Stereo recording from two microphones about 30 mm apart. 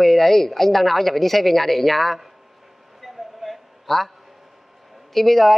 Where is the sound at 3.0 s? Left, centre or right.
Centre.